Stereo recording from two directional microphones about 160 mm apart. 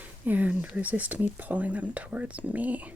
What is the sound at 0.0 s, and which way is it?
Speech, 10° right (ahead or behind).